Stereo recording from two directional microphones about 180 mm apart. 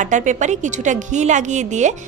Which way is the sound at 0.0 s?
45° right (ahead or behind).